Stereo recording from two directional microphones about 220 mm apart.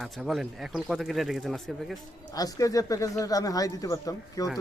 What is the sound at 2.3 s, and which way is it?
Speech, 15° left (ahead or behind).